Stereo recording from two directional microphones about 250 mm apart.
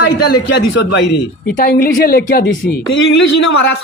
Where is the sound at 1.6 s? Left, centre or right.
Left.